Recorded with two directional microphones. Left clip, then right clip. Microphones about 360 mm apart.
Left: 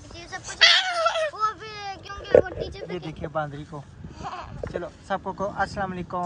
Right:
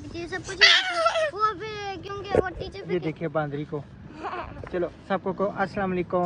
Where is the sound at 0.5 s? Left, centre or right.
Centre.